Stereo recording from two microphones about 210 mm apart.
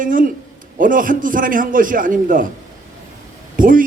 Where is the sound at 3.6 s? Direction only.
40° right (ahead or behind).